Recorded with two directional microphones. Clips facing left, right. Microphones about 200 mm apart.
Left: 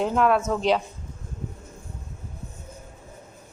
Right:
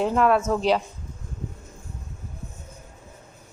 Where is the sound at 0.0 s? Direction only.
Centre (ahead or behind).